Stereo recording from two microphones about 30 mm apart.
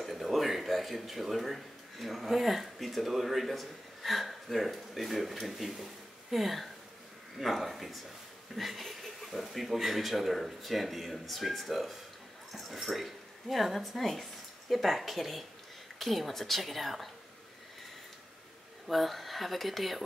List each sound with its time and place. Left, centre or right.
0.0 s speech: centre
8.5 s a sound: centre
9.3 s speech: centre
18.9 s speech: centre